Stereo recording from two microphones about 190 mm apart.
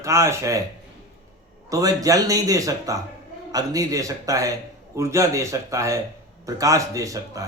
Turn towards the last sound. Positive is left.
turn(degrees=-15)  # may be behind; listen again after turning